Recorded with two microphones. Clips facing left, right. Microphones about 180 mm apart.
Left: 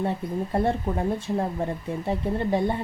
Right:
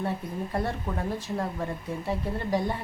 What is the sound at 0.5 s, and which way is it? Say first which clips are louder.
Speech: left 6 dB; 25° left (ahead or behind).